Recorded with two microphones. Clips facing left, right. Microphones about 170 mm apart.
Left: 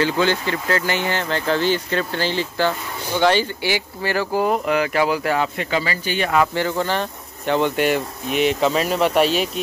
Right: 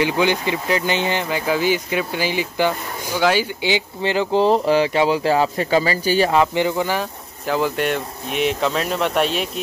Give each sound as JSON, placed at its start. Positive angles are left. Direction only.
{"t": 0.0, "sound": "speech", "side_deg": -15}
{"t": 3.6, "sound": "speech", "side_deg": -20}
{"t": 6.4, "sound": "speech", "side_deg": -15}